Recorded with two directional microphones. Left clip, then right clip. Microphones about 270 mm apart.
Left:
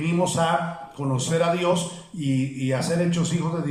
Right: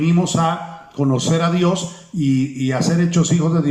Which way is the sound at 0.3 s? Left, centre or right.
Right.